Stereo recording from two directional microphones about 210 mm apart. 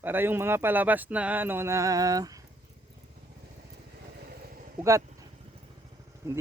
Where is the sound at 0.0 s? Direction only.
10° right (ahead or behind).